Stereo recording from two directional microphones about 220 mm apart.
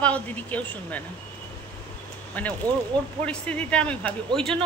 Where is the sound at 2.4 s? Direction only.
5° left (ahead or behind).